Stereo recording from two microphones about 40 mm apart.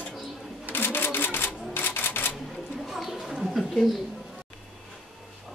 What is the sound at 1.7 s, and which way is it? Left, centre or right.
Typewriter, left.